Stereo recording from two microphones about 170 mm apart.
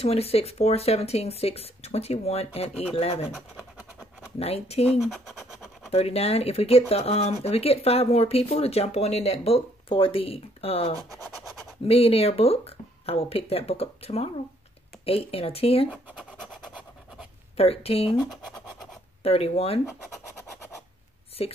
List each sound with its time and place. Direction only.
0.0 s speech: 35° left (ahead or behind)
3.3 s scratch: 5° right (ahead or behind)
4.4 s speech: 35° left (ahead or behind)
4.9 s speech: centre (ahead or behind)
5.9 s speech: 35° left (ahead or behind)
11.3 s scratch: centre (ahead or behind)
11.8 s speech: 35° left (ahead or behind)
17.6 s speech: 35° left (ahead or behind)
18.1 s speech: 20° left (ahead or behind)
19.2 s speech: 35° left (ahead or behind)
21.4 s speech: 35° left (ahead or behind)